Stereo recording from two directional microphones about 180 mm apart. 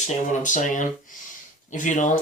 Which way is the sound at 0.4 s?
45° left (ahead or behind).